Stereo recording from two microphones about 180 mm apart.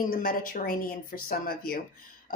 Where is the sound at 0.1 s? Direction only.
50° left (ahead or behind).